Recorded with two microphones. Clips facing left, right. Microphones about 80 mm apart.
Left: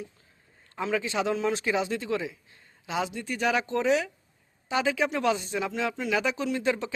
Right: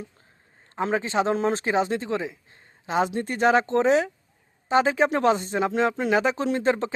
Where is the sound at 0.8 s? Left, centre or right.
Right.